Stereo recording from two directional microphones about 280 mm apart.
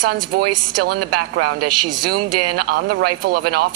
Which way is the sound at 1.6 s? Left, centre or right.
Right.